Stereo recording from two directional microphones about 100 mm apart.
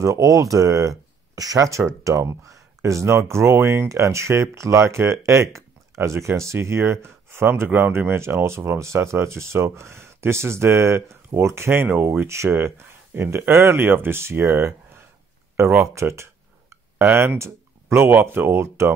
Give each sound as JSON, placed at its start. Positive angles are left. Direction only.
{"t": 0.0, "sound": "speech", "side_deg": -30}